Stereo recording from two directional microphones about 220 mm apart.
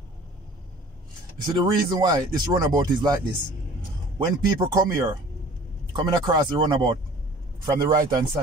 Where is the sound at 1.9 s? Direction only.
20° right (ahead or behind).